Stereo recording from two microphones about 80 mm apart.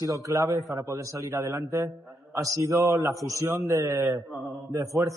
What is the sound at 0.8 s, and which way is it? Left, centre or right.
Speech, right.